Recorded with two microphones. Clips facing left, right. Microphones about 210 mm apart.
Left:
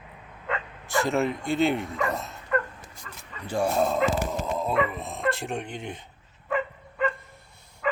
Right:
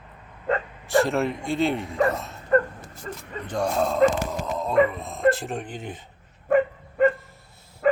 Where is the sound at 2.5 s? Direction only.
40° right (ahead or behind).